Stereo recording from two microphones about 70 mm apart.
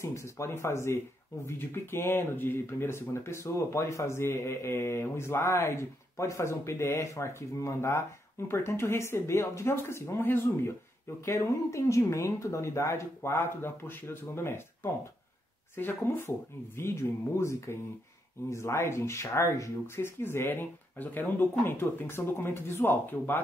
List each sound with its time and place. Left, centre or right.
0.0 s speech: left
11.2 s speech: left